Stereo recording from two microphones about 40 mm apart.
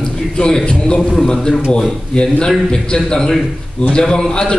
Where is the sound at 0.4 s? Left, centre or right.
Left.